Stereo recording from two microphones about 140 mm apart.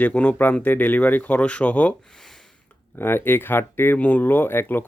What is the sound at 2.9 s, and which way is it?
Speech, 15° left (ahead or behind).